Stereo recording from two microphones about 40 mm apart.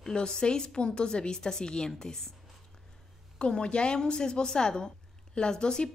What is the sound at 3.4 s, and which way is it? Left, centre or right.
A woman's voice, left.